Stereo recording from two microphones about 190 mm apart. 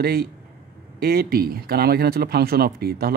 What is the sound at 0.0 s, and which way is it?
Speech, 50° right (ahead or behind).